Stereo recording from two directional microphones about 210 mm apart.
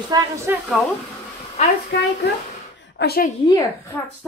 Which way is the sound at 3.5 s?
15° left (ahead or behind).